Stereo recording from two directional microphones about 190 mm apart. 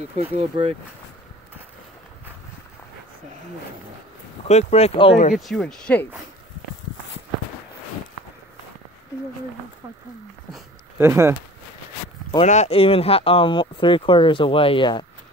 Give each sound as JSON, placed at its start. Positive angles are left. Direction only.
{"t": 0.2, "sound": "speech", "side_deg": -35}
{"t": 4.5, "sound": "speech", "side_deg": 35}
{"t": 5.3, "sound": "speech", "side_deg": 0}
{"t": 11.0, "sound": "speech", "side_deg": -15}
{"t": 12.4, "sound": "speech", "side_deg": 35}